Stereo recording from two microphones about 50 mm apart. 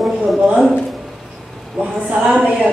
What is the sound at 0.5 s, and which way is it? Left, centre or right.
Speech, centre.